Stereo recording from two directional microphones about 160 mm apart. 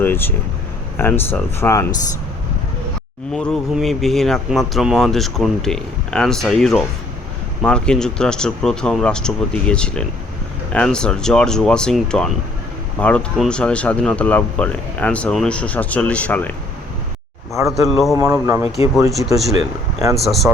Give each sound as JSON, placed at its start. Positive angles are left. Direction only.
{"t": 0.0, "sound": "speech", "side_deg": 15}
{"t": 3.3, "sound": "speech", "side_deg": 5}
{"t": 17.7, "sound": "speech", "side_deg": 0}
{"t": 18.2, "sound": "speech", "side_deg": -20}
{"t": 20.2, "sound": "speech", "side_deg": 0}